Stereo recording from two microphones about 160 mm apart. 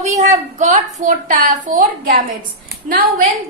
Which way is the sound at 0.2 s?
50° right (ahead or behind).